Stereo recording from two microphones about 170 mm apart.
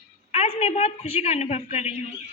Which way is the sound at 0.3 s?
40° left (ahead or behind).